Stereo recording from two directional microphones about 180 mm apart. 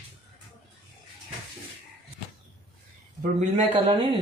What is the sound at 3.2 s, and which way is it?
Speech, 40° right (ahead or behind).